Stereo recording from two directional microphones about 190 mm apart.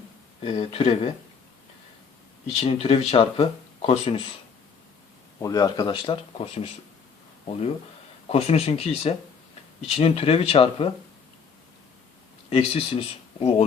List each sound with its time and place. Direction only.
0.4 s speech: 30° left (ahead or behind)
2.5 s speech: 30° left (ahead or behind)
5.4 s speech: 20° left (ahead or behind)
8.3 s speech: 35° left (ahead or behind)
12.5 s speech: 30° left (ahead or behind)